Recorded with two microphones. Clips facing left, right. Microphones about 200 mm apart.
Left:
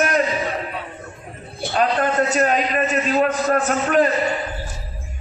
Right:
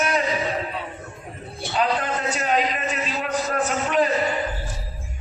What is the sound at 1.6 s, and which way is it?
A man's voice, 50° left (ahead or behind).